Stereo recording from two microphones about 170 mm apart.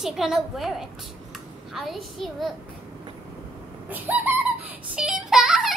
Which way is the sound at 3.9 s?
10° right (ahead or behind).